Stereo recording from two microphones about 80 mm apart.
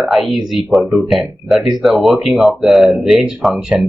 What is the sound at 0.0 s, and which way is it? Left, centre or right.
Speech, centre.